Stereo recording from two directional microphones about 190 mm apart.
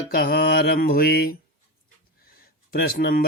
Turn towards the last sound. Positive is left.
turn(degrees=55)  # may be behind; listen again after turning